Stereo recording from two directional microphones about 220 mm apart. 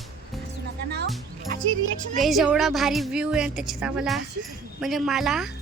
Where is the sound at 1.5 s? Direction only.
35° right (ahead or behind).